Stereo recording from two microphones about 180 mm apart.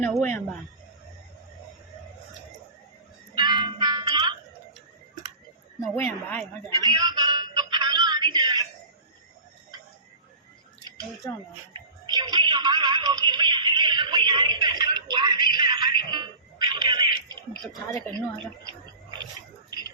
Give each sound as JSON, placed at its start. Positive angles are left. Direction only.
{"t": 0.0, "sound": "a woman's voice", "side_deg": 5}
{"t": 3.3, "sound": "train", "side_deg": -25}
{"t": 5.8, "sound": "a woman's voice", "side_deg": 5}
{"t": 6.7, "sound": "music", "side_deg": -20}
{"t": 12.0, "sound": "music", "side_deg": -25}
{"t": 15.5, "sound": "a sound", "side_deg": -25}